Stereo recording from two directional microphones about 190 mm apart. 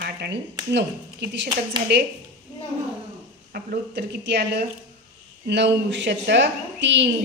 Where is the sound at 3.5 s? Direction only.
60° right (ahead or behind).